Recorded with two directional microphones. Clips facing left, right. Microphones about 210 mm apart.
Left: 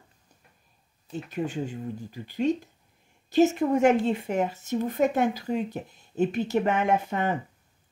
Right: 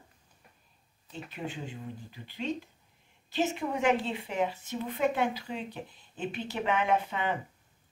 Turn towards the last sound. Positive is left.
turn(degrees=45)  # may be behind; listen again after turning